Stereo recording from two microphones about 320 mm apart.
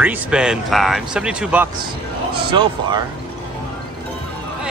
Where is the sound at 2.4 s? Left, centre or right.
Centre.